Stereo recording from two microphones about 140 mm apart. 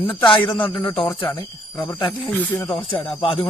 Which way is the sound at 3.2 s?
40° left (ahead or behind).